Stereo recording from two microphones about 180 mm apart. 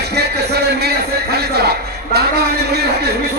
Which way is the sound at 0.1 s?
65° right (ahead or behind).